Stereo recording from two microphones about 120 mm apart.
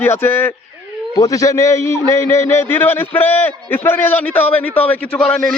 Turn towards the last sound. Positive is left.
turn(degrees=5)  # may be behind; listen again after turning